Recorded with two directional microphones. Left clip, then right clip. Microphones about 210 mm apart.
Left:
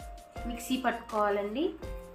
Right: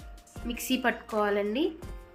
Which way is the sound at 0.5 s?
45° right (ahead or behind).